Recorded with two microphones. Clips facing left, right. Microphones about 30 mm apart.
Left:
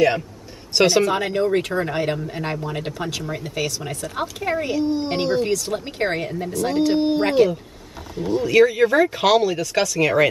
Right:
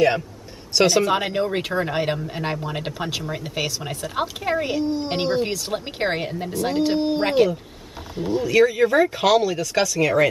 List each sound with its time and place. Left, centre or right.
0.7 s speech: centre
1.0 s speech: centre
4.8 s speech: centre
5.1 s speech: centre
8.5 s speech: centre